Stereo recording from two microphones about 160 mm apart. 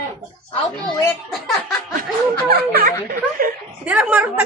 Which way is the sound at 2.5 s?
75° right (ahead or behind).